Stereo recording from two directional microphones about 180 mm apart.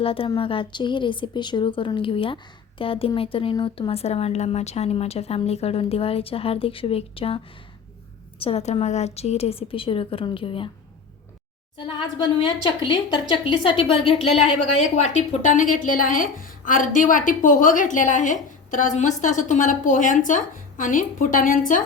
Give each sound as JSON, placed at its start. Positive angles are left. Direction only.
{"t": 0.0, "sound": "speech", "side_deg": 30}
{"t": 11.8, "sound": "a woman's voice", "side_deg": 25}